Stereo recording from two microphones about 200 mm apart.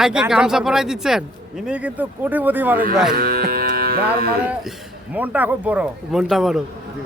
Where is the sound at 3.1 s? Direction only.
45° right (ahead or behind).